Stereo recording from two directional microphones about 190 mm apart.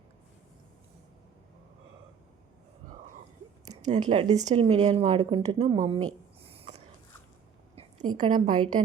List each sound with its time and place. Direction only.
3.8 s speech: 40° right (ahead or behind); by 6.1 s 20° right (ahead or behind)
6.4 s a sound: 30° right (ahead or behind)
7.8 s a woman's voice: 25° right (ahead or behind)